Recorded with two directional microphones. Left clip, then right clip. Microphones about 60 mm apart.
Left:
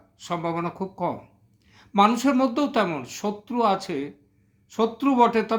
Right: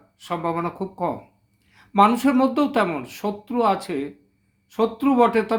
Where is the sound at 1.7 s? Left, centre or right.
Left.